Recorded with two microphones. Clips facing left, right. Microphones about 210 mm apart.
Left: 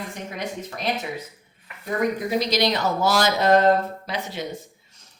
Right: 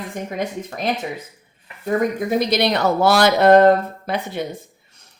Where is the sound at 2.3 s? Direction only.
55° right (ahead or behind).